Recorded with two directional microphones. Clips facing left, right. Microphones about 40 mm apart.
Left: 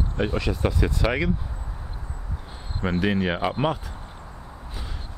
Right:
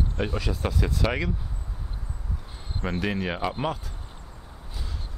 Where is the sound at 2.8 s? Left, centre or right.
Centre.